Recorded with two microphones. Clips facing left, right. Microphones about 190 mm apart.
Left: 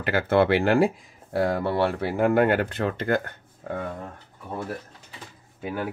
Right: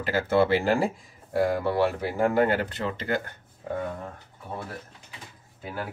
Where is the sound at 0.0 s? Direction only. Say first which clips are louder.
Left 2 dB; 60° left (ahead or behind).